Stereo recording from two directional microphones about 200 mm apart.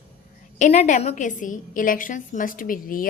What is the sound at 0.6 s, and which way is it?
A woman's voice, 35° left (ahead or behind).